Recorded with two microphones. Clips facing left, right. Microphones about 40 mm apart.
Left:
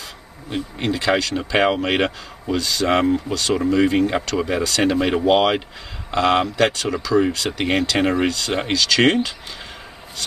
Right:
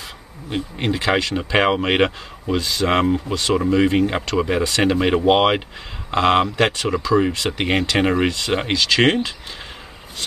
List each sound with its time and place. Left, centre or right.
0.5 s speech: centre
6.5 s speech: right
7.1 s speech: centre
8.3 s speech: right
8.5 s speech: centre